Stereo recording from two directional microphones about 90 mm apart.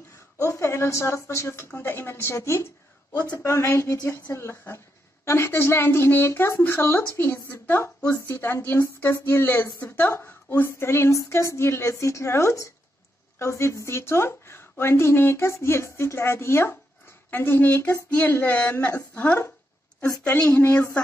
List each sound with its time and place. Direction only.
0.4 s a woman's voice: 35° left (ahead or behind)
20.5 s a woman's voice: 15° left (ahead or behind)